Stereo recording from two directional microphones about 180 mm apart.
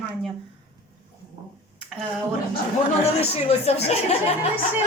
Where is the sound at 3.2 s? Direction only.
35° left (ahead or behind).